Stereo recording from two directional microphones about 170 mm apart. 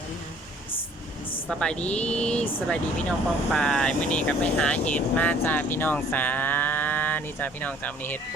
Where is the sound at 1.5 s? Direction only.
5° left (ahead or behind).